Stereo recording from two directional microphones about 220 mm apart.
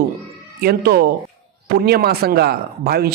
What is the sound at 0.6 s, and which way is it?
Speech, 45° right (ahead or behind).